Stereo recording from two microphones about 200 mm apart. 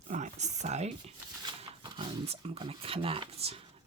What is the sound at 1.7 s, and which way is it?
Speech, 25° right (ahead or behind).